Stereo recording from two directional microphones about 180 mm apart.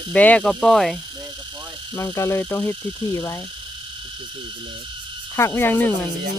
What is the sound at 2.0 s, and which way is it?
Speech, 15° left (ahead or behind).